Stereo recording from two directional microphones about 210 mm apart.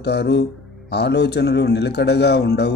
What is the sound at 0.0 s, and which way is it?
Speech, 50° left (ahead or behind).